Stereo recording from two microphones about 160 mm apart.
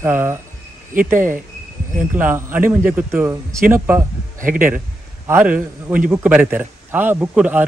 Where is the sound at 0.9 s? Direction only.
55° right (ahead or behind).